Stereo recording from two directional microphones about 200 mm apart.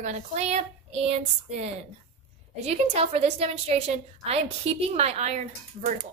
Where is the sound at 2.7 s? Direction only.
30° right (ahead or behind).